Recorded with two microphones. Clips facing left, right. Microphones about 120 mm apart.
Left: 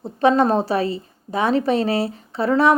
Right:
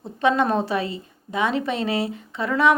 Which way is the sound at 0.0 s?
35° left (ahead or behind).